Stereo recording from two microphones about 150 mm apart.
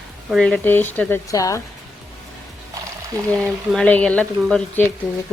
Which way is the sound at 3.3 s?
5° left (ahead or behind).